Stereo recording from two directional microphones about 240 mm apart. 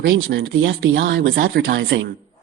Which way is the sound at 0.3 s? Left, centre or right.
Right.